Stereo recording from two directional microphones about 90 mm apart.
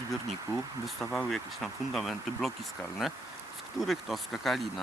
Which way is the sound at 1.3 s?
Centre (ahead or behind).